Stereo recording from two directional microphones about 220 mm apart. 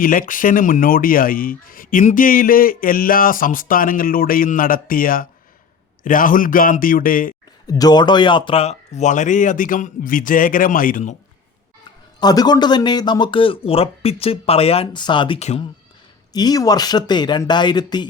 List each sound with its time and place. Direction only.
0.0 s speech: 40° left (ahead or behind)
7.7 s speech: 15° left (ahead or behind); by 11.2 s 35° left (ahead or behind)
12.2 s speech: 15° left (ahead or behind)
16.3 s speech: 15° left (ahead or behind)